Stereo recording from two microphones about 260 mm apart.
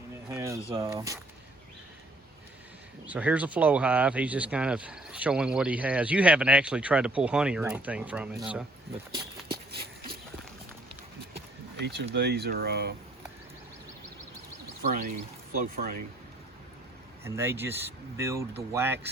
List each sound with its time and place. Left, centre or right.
0.3 s speech: centre
3.1 s speech: centre
11.8 s speech: right
15.5 s speech: right
17.2 s speech: centre